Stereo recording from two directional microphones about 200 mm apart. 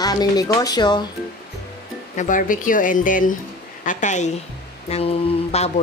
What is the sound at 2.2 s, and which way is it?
A woman's voice, 40° left (ahead or behind).